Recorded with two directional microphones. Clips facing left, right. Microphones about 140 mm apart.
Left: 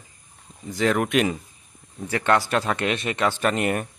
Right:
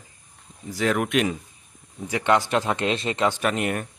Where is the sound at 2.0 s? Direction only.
15° right (ahead or behind).